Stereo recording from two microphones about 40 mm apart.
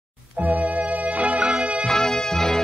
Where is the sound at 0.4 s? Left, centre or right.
Right.